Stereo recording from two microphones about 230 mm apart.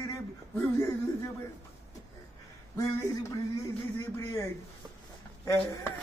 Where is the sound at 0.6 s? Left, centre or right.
Centre.